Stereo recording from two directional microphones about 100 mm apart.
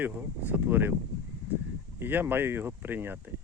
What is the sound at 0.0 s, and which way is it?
Speech, 15° right (ahead or behind).